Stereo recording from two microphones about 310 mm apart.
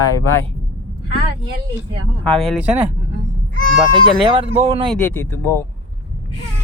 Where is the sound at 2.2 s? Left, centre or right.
Centre.